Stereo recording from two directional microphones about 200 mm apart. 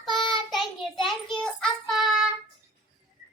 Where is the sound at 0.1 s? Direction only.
25° left (ahead or behind).